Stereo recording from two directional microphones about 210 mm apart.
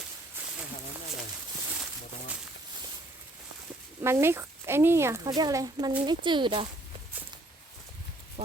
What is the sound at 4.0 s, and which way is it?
Speech, 10° right (ahead or behind).